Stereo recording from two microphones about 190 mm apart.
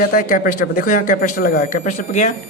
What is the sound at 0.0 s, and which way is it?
Speech, 50° left (ahead or behind).